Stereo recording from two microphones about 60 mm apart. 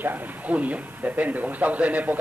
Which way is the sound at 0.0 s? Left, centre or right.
Right.